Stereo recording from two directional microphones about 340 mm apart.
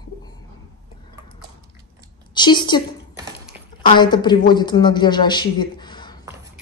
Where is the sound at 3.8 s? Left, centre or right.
Centre.